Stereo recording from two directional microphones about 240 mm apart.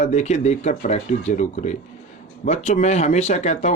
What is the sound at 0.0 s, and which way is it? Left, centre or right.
Speech, left.